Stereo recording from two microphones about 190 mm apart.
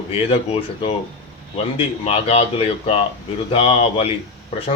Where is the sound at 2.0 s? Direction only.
30° left (ahead or behind).